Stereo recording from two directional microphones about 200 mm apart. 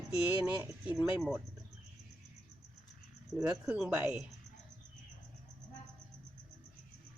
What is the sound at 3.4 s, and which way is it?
Speech, 5° right (ahead or behind).